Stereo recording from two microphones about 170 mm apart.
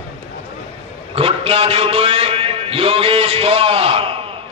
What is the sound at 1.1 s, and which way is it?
A man's voice, 35° right (ahead or behind).